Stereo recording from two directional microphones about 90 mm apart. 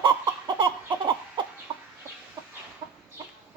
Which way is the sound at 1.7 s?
90° right.